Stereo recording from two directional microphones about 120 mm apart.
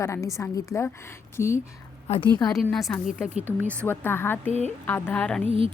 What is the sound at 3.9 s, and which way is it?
A woman's voice, 20° left (ahead or behind).